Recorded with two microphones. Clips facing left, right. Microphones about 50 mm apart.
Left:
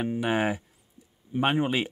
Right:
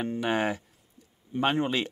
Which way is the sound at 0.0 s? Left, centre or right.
Centre.